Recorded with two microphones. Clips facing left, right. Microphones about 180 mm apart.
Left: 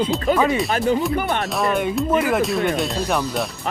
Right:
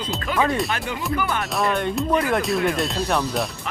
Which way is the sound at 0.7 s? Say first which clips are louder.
Left 9 dB; 40° left (ahead or behind).